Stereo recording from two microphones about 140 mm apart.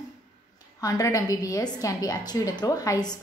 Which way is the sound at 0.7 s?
25° left (ahead or behind).